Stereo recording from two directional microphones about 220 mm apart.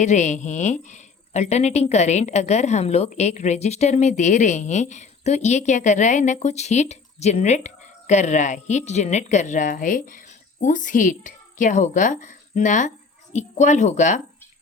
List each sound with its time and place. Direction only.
0.0 s a woman's voice: 35° left (ahead or behind)